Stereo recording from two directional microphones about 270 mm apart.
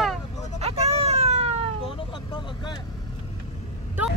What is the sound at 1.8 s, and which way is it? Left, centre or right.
Vehicle, centre.